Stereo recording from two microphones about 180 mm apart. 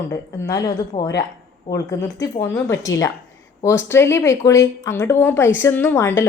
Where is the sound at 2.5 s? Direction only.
15° left (ahead or behind).